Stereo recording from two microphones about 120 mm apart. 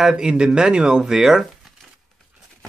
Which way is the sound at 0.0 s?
5° right (ahead or behind).